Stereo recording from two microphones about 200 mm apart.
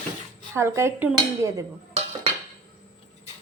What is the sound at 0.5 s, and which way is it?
A woman's voice, 15° right (ahead or behind).